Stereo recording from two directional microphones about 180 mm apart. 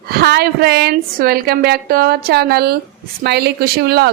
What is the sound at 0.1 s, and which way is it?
Speech, 60° right (ahead or behind).